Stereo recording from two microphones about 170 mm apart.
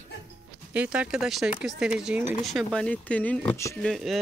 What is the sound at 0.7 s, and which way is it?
Speech, 5° right (ahead or behind).